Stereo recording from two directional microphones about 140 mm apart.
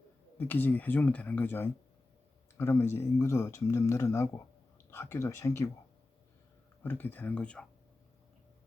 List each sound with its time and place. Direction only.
0.3 s speech: 15° left (ahead or behind)
6.8 s speech: 15° left (ahead or behind)